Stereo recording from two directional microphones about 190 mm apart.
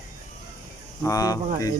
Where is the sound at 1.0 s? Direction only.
20° left (ahead or behind).